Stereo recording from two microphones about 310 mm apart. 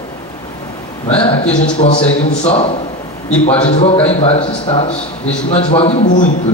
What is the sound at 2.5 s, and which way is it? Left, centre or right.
A man's voice, centre.